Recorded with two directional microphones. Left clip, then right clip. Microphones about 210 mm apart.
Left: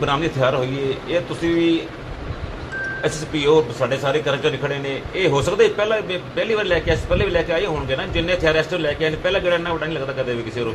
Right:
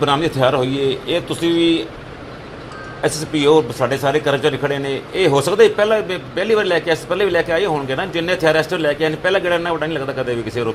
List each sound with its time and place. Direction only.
0.0 s a man's voice: 55° right (ahead or behind)
3.0 s a man's voice: 55° right (ahead or behind)